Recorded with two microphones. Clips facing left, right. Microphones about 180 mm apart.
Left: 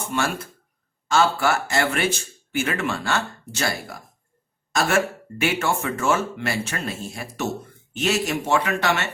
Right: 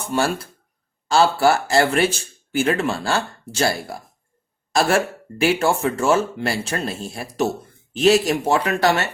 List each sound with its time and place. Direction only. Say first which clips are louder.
0.1 s speech: right 5 dB; 35° right (ahead or behind)